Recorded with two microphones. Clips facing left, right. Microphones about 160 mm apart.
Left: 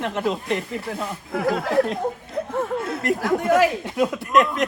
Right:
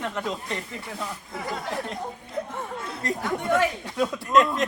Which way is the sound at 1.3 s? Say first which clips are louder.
Left 12 dB; 65° left (ahead or behind).